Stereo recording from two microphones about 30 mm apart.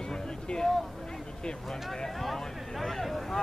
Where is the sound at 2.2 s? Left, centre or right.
Centre.